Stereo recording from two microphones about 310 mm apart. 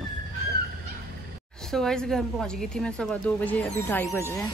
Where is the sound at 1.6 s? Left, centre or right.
Centre.